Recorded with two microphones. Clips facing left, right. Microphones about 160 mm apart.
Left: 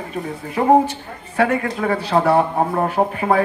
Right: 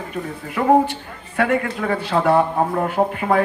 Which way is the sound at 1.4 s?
40° left (ahead or behind).